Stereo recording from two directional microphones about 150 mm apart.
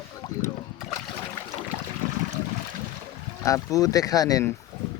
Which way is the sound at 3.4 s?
20° left (ahead or behind).